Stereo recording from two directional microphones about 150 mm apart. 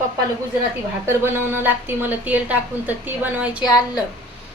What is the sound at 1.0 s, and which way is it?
A woman's voice, 15° right (ahead or behind).